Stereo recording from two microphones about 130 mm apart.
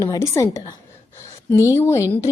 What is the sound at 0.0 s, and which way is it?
A woman's voice, 25° left (ahead or behind).